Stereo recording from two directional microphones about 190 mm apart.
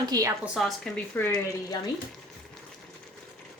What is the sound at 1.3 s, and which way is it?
Speech, 20° left (ahead or behind).